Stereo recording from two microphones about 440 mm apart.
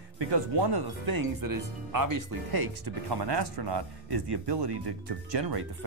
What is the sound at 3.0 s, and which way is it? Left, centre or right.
Speech, right.